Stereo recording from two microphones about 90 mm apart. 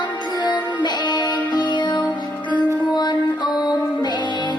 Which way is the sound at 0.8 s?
55° left (ahead or behind).